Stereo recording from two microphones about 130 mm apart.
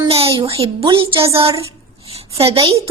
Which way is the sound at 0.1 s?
45° right (ahead or behind).